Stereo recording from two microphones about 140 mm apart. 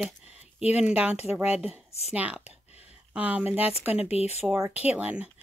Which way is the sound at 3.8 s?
10° right (ahead or behind).